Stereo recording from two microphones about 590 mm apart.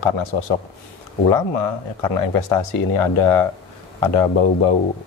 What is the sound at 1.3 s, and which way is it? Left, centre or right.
Speech, left.